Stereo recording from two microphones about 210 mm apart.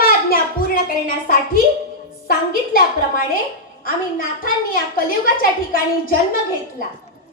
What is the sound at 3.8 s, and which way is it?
Speech, 40° left (ahead or behind).